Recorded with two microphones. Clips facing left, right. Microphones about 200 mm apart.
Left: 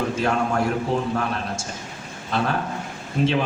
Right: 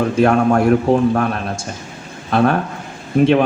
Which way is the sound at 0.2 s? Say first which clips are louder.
Right 11 dB; 55° right (ahead or behind).